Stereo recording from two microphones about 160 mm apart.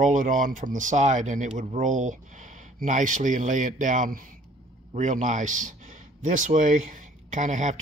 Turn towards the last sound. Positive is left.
turn(degrees=-50)  # may be behind; listen again after turning